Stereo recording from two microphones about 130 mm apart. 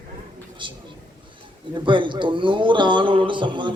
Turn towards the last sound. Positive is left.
turn(degrees=-40)  # may be behind; listen again after turning